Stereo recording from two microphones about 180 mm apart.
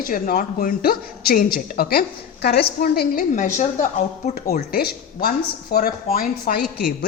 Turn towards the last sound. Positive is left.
turn(degrees=55)  # may be behind; listen again after turning